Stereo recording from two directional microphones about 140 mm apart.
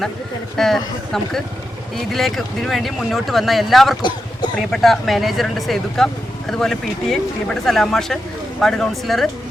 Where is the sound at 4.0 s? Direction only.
30° left (ahead or behind).